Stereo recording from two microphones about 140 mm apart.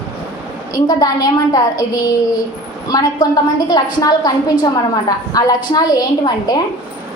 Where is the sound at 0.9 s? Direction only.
25° left (ahead or behind).